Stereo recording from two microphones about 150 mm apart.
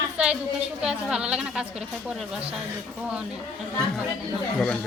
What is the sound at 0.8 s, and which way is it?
Speech, 5° right (ahead or behind).